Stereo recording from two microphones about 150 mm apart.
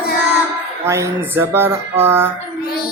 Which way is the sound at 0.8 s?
20° right (ahead or behind).